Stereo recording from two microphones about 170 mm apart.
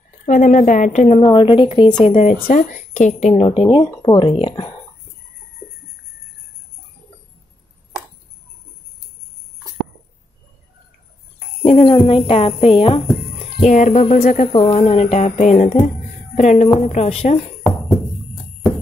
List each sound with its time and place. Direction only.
0.3 s a woman's voice: 50° left (ahead or behind)
1.2 s speech: 30° left (ahead or behind)
2.1 s a woman's voice: 50° left (ahead or behind); by 4.6 s 30° left (ahead or behind)
11.6 s speech: 35° left (ahead or behind)
13.6 s a woman's voice: 45° left (ahead or behind)
14.5 s speech: 35° left (ahead or behind)